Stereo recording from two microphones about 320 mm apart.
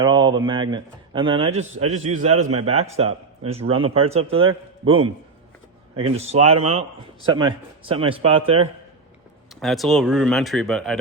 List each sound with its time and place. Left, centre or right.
0.0 s speech: centre
6.0 s speech: centre
9.6 s speech: centre